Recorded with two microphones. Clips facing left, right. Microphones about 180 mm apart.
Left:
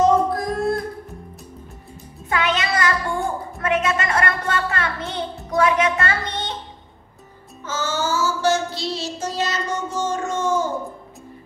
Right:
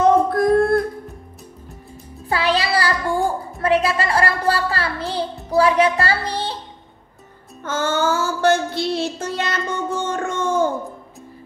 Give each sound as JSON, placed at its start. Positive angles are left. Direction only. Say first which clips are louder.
{"t": 0.0, "sound": "music", "louder": "right 2 dB", "side_deg": -60}
{"t": 2.2, "sound": "music", "louder": "right 2 dB", "side_deg": -35}
{"t": 3.3, "sound": "a sound", "louder": "right 4 dB", "side_deg": -35}
{"t": 7.6, "sound": "child singing", "louder": "right 4 dB", "side_deg": -55}